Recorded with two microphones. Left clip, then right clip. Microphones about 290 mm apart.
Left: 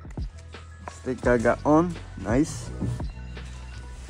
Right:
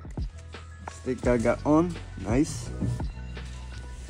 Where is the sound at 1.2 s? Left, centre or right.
Left.